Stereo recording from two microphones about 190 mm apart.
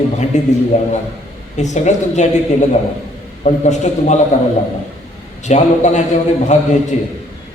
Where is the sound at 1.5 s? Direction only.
40° left (ahead or behind).